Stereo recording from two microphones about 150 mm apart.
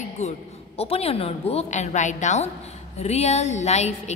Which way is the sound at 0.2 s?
45° left (ahead or behind).